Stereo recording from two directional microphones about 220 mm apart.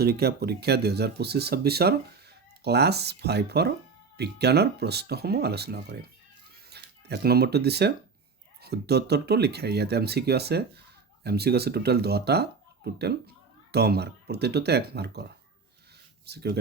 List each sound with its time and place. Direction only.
0.0 s speech: 45° right (ahead or behind)